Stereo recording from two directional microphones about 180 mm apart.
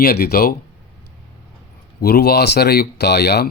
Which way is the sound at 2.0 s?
60° left (ahead or behind).